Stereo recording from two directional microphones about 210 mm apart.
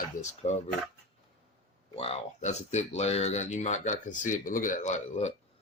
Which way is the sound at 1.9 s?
30° left (ahead or behind).